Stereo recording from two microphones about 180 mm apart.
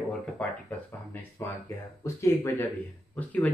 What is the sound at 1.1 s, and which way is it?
Speech, 10° left (ahead or behind).